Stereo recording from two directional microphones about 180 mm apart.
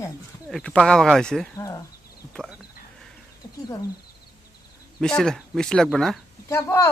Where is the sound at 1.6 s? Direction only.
20° left (ahead or behind).